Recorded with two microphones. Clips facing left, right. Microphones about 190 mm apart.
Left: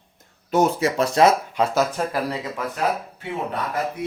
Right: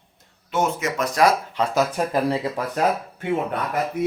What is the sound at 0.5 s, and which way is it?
Speech, 35° left (ahead or behind).